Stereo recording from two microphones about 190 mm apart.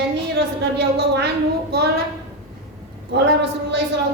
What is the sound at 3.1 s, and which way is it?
Speech, 60° right (ahead or behind).